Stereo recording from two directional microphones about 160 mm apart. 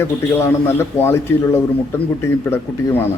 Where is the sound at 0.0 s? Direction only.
15° left (ahead or behind).